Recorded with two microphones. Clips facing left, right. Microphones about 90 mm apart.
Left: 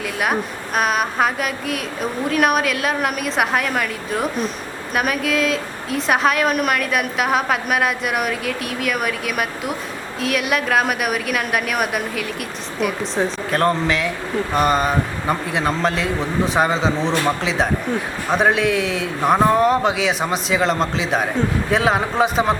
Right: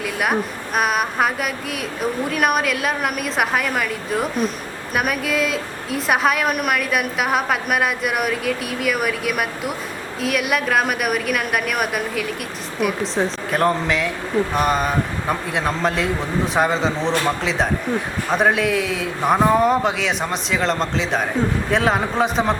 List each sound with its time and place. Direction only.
0.0 s a woman's voice: centre (ahead or behind)